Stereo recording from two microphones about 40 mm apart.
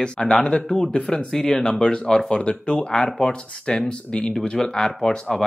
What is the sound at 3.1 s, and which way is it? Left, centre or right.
Speech, centre.